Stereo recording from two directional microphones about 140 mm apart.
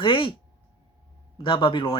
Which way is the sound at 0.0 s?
35° left (ahead or behind).